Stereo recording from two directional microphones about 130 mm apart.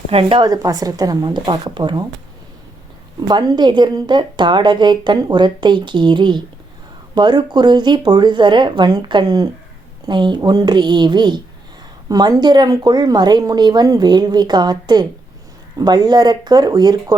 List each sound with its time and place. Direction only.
0.1 s speech: 45° right (ahead or behind)
0.4 s speech: 30° right (ahead or behind)
3.2 s speech: 35° right (ahead or behind)